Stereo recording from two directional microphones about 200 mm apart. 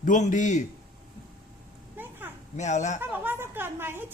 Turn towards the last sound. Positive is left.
turn(degrees=-10)  # may be behind; listen again after turning